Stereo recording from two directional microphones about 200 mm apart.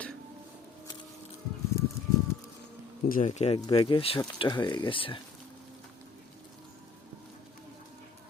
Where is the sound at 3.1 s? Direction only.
40° left (ahead or behind).